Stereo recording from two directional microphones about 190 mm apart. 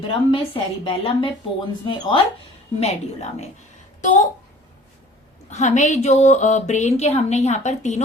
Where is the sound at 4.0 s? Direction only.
40° left (ahead or behind).